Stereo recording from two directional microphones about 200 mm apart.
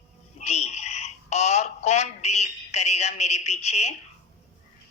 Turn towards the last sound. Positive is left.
turn(degrees=35)  # may be behind; listen again after turning